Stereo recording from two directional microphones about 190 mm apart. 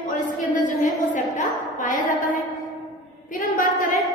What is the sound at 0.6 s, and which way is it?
A woman's voice, 40° left (ahead or behind).